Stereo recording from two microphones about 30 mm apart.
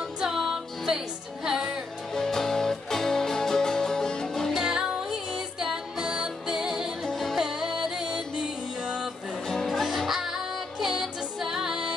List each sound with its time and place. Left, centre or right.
0.2 s music: centre
2.1 s music: centre
4.6 s music: right
6.4 s music: centre
9.5 s music: centre
10.0 s music: centre